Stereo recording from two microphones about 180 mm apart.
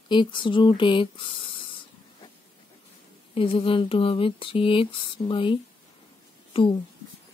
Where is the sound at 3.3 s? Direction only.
30° left (ahead or behind).